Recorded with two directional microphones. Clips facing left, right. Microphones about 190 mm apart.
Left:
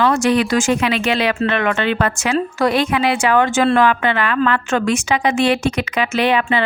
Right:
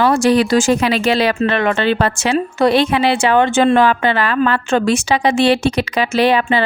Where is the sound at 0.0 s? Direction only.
35° right (ahead or behind).